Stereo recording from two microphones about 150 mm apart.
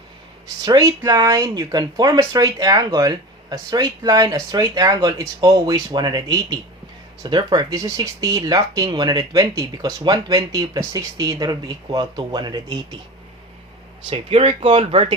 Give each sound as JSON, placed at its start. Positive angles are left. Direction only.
{"t": 0.6, "sound": "speech", "side_deg": -25}
{"t": 14.1, "sound": "speech", "side_deg": -35}